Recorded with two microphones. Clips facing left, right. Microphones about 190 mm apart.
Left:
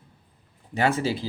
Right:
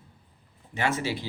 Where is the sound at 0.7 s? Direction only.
35° left (ahead or behind).